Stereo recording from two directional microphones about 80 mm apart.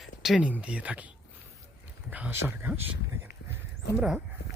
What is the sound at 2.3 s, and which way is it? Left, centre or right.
Speech, right.